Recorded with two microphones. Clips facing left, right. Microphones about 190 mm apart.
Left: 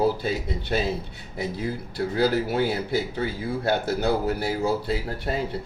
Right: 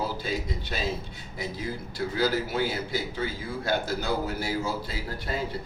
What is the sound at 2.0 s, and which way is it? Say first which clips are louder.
A man's voice: left 4 dB; 60° left (ahead or behind).